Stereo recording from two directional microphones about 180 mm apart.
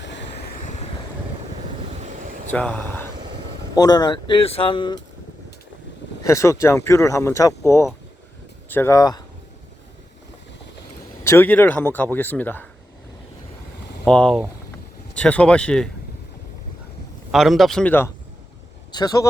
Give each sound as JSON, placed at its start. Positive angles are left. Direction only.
{"t": 0.0, "sound": "vehicle", "side_deg": 75}
{"t": 2.5, "sound": "speech", "side_deg": 10}
{"t": 3.8, "sound": "speech", "side_deg": 20}
{"t": 6.2, "sound": "speech", "side_deg": 15}
{"t": 11.2, "sound": "speech", "side_deg": 15}
{"t": 14.0, "sound": "speech", "side_deg": 5}
{"t": 17.3, "sound": "speech", "side_deg": 0}
{"t": 18.9, "sound": "speech", "side_deg": 20}